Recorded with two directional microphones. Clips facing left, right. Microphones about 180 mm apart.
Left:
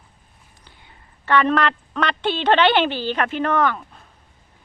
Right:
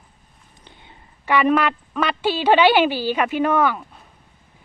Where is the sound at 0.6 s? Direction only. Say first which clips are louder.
Right 4 dB; 20° right (ahead or behind).